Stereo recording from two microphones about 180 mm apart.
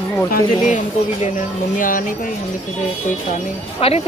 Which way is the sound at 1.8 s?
50° left (ahead or behind).